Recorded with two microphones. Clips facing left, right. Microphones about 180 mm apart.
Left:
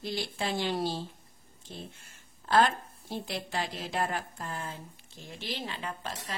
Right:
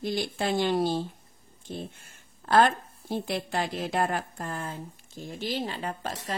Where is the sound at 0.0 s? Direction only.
50° right (ahead or behind).